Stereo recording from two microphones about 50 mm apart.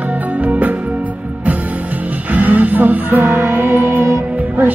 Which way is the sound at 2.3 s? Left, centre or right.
Right.